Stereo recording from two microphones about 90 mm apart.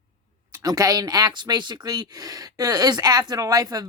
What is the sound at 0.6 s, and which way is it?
Speech, 45° right (ahead or behind).